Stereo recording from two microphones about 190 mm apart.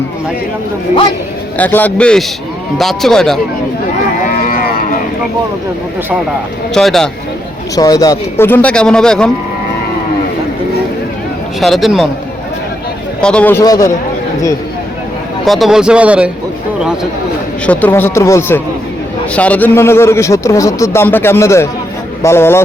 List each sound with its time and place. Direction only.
1.5 s a man's voice: 10° left (ahead or behind)
4.4 s livestock: 50° left (ahead or behind)
6.7 s a man's voice: centre (ahead or behind)
7.8 s speech: 20° left (ahead or behind)
11.6 s a man's voice: centre (ahead or behind)
13.2 s speech: 5° left (ahead or behind)
15.4 s a man's voice: centre (ahead or behind)
17.7 s speech: 10° left (ahead or behind)